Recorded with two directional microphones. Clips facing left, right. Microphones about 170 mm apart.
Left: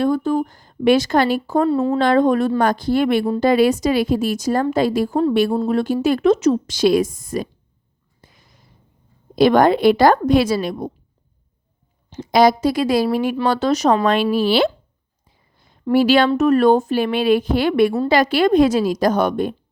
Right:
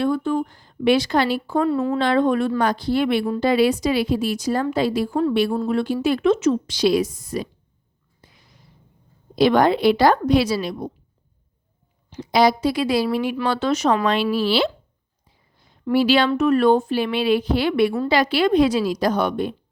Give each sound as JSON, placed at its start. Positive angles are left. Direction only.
{"t": 0.0, "sound": "a woman's voice", "side_deg": 40}
{"t": 1.7, "sound": "speech", "side_deg": 30}
{"t": 2.0, "sound": "a woman's voice", "side_deg": 45}
{"t": 8.2, "sound": "a sound", "side_deg": 45}
{"t": 9.3, "sound": "a woman's voice", "side_deg": 50}
{"t": 12.2, "sound": "a woman's voice", "side_deg": 45}
{"t": 15.9, "sound": "a woman's voice", "side_deg": 45}